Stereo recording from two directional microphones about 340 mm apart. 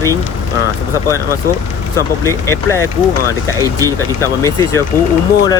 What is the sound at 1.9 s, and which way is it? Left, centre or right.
Speech, centre.